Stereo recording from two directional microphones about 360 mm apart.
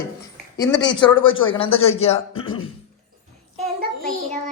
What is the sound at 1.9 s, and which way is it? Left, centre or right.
Speech, centre.